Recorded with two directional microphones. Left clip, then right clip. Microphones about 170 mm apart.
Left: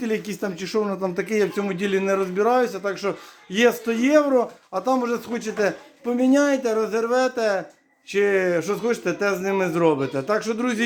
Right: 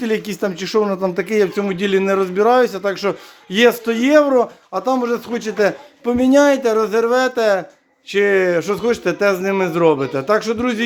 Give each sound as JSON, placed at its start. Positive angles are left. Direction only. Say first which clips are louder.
{"t": 0.0, "sound": "speech", "louder": "right 6 dB", "side_deg": -25}